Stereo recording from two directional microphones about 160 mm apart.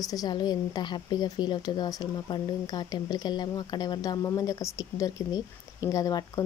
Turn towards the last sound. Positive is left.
turn(degrees=20)  # may be behind; listen again after turning